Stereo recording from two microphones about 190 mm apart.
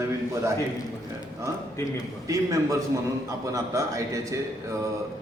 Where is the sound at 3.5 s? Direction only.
15° right (ahead or behind).